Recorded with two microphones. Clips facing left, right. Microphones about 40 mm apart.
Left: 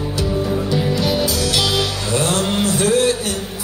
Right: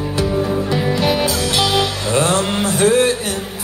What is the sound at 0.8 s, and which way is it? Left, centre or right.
Music, right.